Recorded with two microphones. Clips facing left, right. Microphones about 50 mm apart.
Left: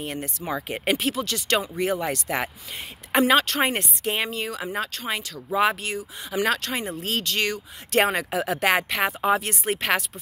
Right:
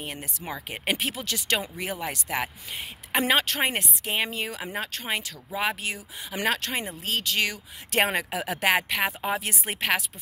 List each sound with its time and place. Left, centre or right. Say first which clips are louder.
0.0 s speech: left 5 dB; centre
0.9 s speech: left 5 dB; centre
4.3 s speech: left 3 dB; centre
5.5 s speech: left 7 dB; centre
5.8 s speech: left 3 dB; centre
7.0 s speech: even; centre